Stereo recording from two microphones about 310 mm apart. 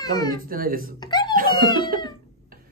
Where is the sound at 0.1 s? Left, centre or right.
Centre.